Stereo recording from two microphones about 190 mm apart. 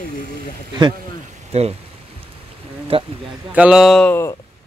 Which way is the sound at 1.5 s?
35° right (ahead or behind).